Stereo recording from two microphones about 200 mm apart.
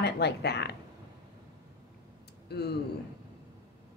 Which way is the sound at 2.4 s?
55° left (ahead or behind).